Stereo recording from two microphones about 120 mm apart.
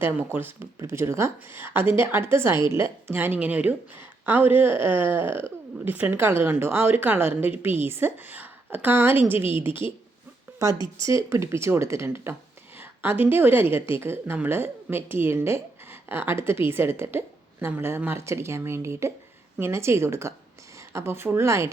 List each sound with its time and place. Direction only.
0.0 s a woman's voice: 20° right (ahead or behind)
11.0 s a woman's voice: 25° right (ahead or behind)